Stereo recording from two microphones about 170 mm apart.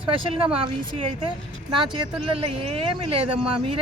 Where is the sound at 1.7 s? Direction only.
30° right (ahead or behind).